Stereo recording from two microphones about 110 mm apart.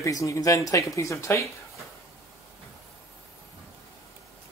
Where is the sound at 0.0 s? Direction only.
30° left (ahead or behind).